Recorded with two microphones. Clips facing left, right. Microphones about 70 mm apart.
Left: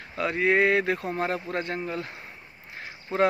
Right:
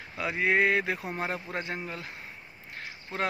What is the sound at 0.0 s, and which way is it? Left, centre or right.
Speech, centre.